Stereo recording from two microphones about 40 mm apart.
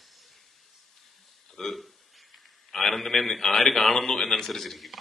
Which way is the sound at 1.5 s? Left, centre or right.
Centre.